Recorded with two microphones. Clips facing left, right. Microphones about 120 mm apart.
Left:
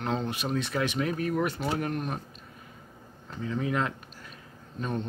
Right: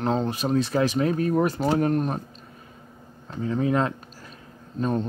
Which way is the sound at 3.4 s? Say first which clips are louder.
Right 6 dB; 35° right (ahead or behind).